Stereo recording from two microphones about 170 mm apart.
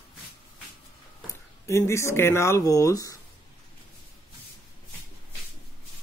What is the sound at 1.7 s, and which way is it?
Speech, 15° left (ahead or behind).